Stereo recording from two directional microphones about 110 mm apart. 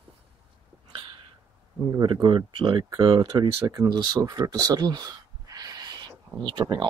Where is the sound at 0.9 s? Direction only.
55° right (ahead or behind).